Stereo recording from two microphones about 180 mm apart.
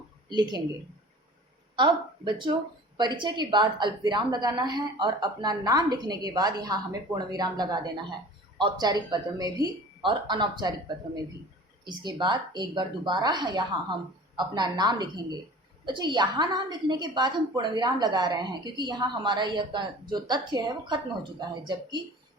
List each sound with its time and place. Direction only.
0.3 s a woman's voice: 25° right (ahead or behind)
1.7 s a woman's voice: 25° right (ahead or behind)